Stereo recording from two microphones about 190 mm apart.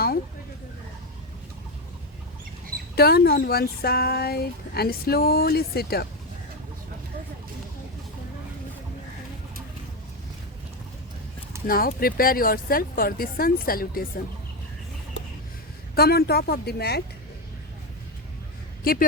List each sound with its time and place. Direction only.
2.9 s speech: 55° left (ahead or behind)
11.7 s speech: 50° left (ahead or behind)
16.0 s a woman's voice: 55° left (ahead or behind)
18.8 s speech: 50° left (ahead or behind)